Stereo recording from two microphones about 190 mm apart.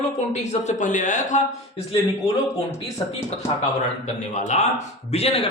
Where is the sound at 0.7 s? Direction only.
40° left (ahead or behind).